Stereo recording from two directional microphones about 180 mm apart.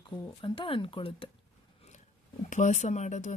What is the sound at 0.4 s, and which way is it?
Speech, 30° left (ahead or behind).